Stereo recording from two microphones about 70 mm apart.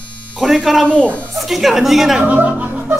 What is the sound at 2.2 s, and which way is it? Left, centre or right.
Music, right.